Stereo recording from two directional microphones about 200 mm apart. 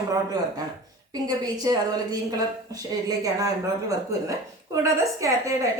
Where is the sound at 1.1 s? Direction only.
20° right (ahead or behind).